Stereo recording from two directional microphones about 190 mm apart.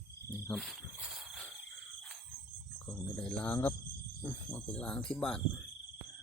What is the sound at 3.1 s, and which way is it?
Speech, 5° left (ahead or behind).